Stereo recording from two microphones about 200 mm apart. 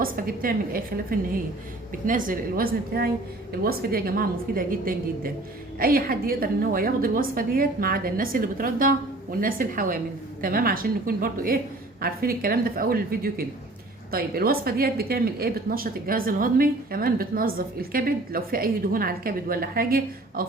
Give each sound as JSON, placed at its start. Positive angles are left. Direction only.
{"t": 0.0, "sound": "a woman's voice", "side_deg": -45}